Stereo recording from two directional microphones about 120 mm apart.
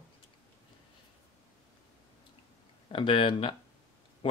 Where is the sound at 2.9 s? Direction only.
50° left (ahead or behind).